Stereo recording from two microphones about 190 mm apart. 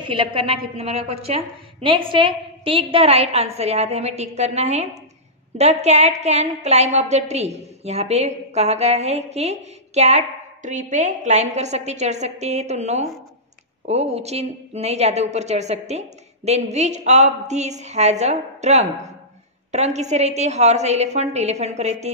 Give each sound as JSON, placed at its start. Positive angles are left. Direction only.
{"t": 0.0, "sound": "a woman's voice", "side_deg": -25}